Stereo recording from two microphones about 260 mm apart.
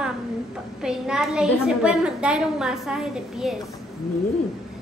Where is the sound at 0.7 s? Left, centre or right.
Centre.